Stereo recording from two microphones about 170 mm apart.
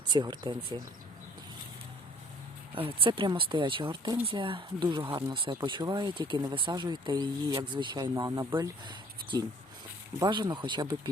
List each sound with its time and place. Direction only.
0.1 s speech: 25° right (ahead or behind)
2.7 s speech: 30° right (ahead or behind)